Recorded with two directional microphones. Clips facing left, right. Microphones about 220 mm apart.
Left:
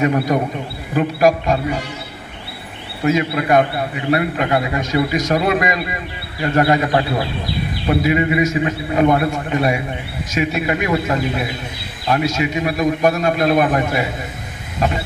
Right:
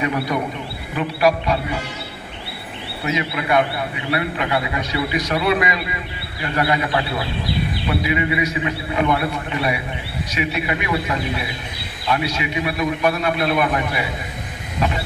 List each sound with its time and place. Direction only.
0.0 s a man's voice: 45° left (ahead or behind)
3.1 s a man's voice: 45° left (ahead or behind)